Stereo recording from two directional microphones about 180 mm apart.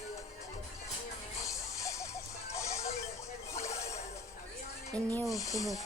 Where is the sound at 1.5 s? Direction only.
15° left (ahead or behind).